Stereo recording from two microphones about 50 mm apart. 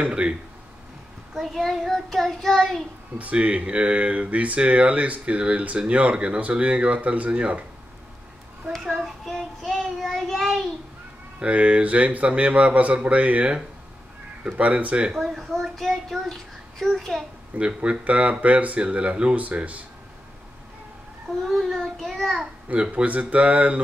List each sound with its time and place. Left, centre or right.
1.4 s a child's voice: centre
3.2 s speech: right
9.0 s a child's voice: centre
9.7 s child singing: centre
10.1 s child singing: centre
11.3 s speech: right
15.3 s a child's voice: centre
17.6 s speech: right
21.5 s a child's voice: centre
22.7 s speech: right